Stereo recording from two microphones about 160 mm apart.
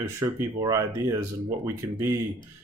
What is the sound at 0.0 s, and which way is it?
Speech, 20° right (ahead or behind).